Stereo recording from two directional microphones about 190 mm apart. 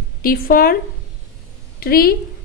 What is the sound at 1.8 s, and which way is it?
Speech, 50° left (ahead or behind).